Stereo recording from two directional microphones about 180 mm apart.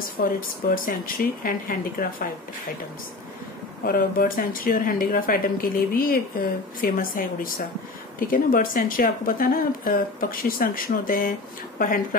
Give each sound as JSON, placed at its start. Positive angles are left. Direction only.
{"t": 0.2, "sound": "a woman's voice", "side_deg": 50}
{"t": 3.8, "sound": "a woman's voice", "side_deg": 55}